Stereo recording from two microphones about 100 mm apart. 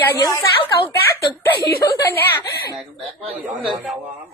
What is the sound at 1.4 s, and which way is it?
Speech, 30° left (ahead or behind).